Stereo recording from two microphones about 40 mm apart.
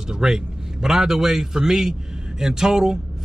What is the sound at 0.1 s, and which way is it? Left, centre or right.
A man's voice, centre.